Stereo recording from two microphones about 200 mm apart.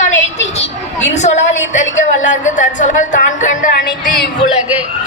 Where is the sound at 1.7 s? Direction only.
35° left (ahead or behind).